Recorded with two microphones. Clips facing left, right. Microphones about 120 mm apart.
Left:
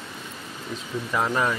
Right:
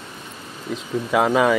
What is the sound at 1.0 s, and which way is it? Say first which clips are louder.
Speech: right 7 dB; 80° right.